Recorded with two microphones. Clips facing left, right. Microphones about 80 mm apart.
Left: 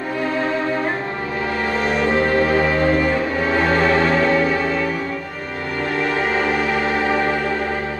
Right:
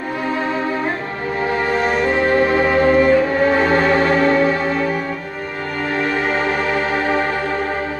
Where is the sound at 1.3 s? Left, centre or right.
Right.